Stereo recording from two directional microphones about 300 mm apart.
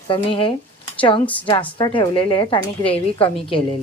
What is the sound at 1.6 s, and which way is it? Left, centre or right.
A woman's voice, centre.